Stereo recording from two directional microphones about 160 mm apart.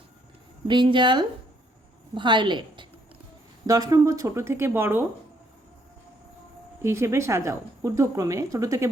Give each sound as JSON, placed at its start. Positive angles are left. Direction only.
{"t": 0.7, "sound": "a woman's voice", "side_deg": -30}
{"t": 6.8, "sound": "a woman's voice", "side_deg": -15}